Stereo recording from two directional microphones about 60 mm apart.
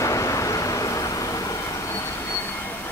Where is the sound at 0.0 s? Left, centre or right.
Left.